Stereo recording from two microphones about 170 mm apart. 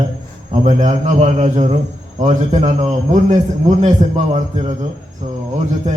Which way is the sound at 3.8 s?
40° right (ahead or behind).